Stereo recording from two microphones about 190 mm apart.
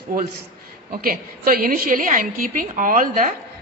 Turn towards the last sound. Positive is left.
turn(degrees=-45)  # may be behind; listen again after turning